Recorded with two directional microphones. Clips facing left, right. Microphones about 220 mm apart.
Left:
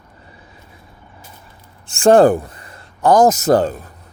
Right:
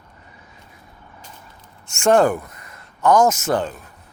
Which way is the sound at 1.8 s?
35° left (ahead or behind).